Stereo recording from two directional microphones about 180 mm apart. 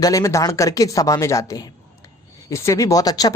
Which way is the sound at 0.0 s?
20° left (ahead or behind).